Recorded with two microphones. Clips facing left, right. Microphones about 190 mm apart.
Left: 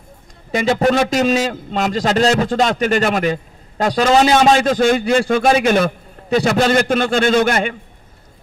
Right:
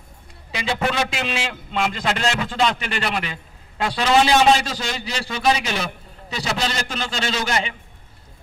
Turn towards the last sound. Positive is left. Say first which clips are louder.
# left 9 dB
turn(degrees=50)  # may be behind; listen again after turning